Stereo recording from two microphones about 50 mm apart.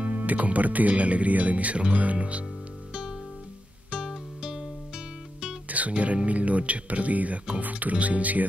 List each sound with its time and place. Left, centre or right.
0.2 s speech: right
2.9 s guitar: centre
3.9 s music: centre
5.7 s speech: right